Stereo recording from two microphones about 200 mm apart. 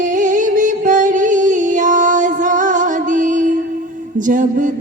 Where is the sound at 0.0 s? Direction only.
40° right (ahead or behind).